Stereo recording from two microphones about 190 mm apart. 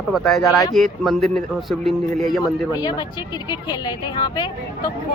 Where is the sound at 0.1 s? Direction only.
Centre (ahead or behind).